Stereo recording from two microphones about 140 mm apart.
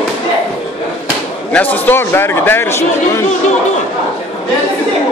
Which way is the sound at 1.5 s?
10° left (ahead or behind).